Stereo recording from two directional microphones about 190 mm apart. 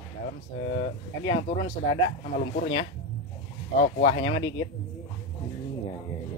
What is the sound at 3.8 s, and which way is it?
Speech, 30° left (ahead or behind).